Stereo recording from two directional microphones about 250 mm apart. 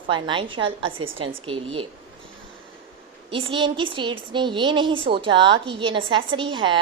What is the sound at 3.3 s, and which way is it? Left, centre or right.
A woman's voice, right.